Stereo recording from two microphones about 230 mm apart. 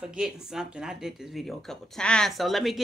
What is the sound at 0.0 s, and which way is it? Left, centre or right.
Speech, centre.